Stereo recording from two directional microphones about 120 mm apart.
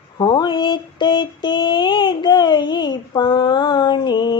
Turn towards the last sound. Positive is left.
turn(degrees=40)  # may be behind; listen again after turning